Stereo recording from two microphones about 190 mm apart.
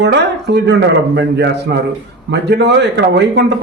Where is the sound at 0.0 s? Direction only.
65° right (ahead or behind).